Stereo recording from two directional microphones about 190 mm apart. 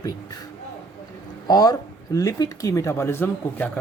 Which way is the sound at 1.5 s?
20° left (ahead or behind).